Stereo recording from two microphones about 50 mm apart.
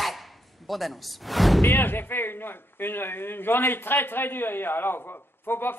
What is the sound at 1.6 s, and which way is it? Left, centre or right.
Speech, left.